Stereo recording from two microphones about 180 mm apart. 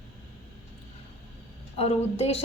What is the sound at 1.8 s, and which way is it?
Speech, 35° left (ahead or behind).